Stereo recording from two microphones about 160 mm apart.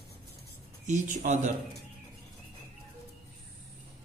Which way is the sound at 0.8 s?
50° right (ahead or behind).